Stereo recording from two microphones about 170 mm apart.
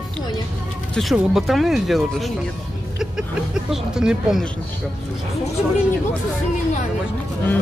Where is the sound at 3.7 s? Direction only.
5° right (ahead or behind).